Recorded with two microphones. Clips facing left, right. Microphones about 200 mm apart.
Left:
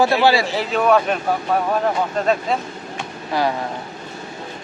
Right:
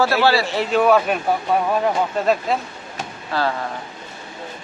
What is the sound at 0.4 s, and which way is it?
Speech, centre (ahead or behind).